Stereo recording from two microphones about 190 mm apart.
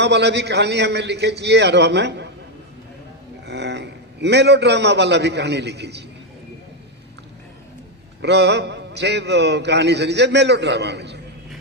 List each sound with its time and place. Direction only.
0.0 s a man's voice: 65° right (ahead or behind)
3.4 s a man's voice: 65° right (ahead or behind)
8.2 s a man's voice: 65° right (ahead or behind)